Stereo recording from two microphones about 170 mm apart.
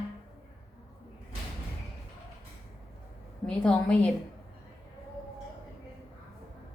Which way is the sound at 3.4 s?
5° left (ahead or behind).